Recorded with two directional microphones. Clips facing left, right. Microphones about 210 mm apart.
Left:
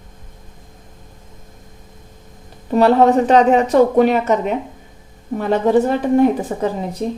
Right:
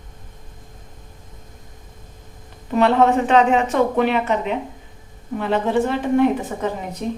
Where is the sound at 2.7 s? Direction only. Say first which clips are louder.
Left 4 dB; 35° left (ahead or behind).